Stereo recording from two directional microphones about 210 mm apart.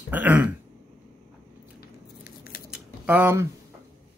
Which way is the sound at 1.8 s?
45° left (ahead or behind).